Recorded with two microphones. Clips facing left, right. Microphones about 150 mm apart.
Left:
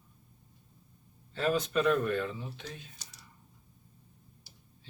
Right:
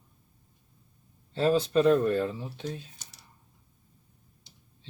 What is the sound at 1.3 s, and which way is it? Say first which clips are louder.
Speech: right 5 dB; 30° right (ahead or behind).